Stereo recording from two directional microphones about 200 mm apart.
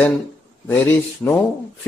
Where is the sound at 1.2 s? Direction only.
Centre (ahead or behind).